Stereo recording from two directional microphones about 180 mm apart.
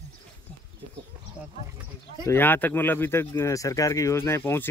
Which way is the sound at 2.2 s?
10° left (ahead or behind).